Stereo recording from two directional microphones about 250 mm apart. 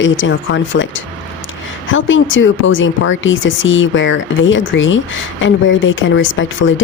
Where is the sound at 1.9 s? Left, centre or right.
Left.